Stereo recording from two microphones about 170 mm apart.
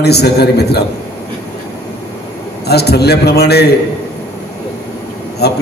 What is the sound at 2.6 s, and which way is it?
A man's voice, 75° left (ahead or behind).